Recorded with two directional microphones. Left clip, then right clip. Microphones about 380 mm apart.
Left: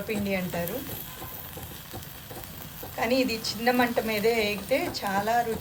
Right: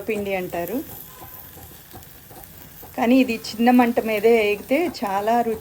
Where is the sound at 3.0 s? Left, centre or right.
Centre.